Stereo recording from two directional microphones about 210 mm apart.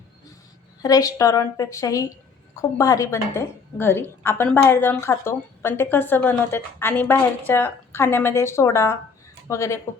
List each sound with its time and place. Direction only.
0.8 s a woman's voice: 15° left (ahead or behind)